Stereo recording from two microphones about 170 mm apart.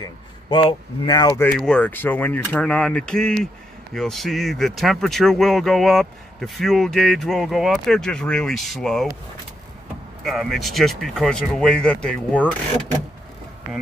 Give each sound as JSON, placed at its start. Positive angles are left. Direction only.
{"t": 0.0, "sound": "speech", "side_deg": 30}
{"t": 1.4, "sound": "speech", "side_deg": 5}
{"t": 10.2, "sound": "speech", "side_deg": 0}